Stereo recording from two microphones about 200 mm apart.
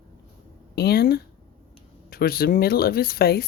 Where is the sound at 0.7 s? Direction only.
55° left (ahead or behind).